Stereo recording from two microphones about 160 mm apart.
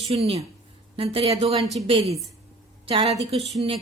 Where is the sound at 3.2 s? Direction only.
35° right (ahead or behind).